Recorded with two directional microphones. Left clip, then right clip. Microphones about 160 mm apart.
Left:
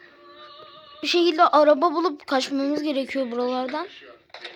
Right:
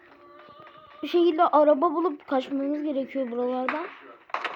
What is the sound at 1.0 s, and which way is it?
Speech, 10° right (ahead or behind).